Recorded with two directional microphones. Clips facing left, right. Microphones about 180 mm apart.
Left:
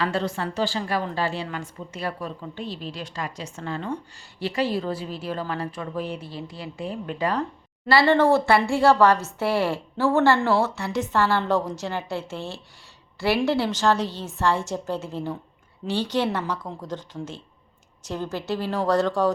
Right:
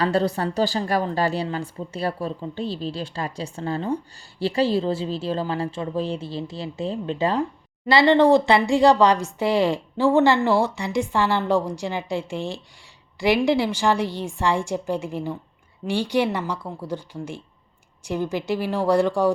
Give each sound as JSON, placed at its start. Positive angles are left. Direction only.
{"t": 0.0, "sound": "a woman's voice", "side_deg": -35}